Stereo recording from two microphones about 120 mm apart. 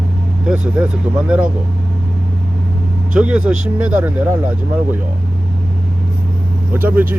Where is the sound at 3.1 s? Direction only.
10° right (ahead or behind).